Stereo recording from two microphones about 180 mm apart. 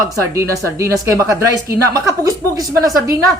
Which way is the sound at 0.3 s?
15° right (ahead or behind).